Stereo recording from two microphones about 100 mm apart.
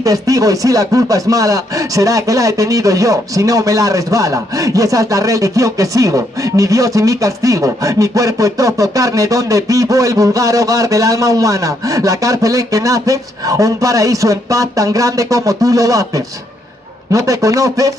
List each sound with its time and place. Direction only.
0.0 s speech: 35° right (ahead or behind)
17.1 s speech: 35° right (ahead or behind)